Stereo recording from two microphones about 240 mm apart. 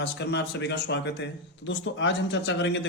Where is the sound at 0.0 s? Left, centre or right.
Left.